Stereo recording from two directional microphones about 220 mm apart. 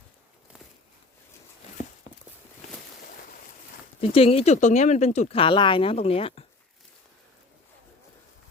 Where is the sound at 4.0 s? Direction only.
25° left (ahead or behind).